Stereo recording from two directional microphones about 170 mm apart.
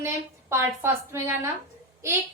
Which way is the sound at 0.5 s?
15° right (ahead or behind).